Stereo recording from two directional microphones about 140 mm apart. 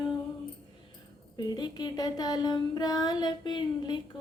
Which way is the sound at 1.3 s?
30° left (ahead or behind).